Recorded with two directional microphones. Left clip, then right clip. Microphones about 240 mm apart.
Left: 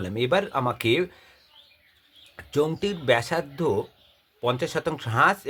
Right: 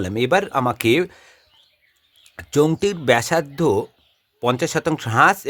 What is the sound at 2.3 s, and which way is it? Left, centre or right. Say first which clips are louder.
Speech: right 7 dB; right.